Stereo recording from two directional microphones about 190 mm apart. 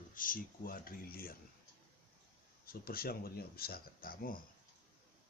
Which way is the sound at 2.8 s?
50° left (ahead or behind).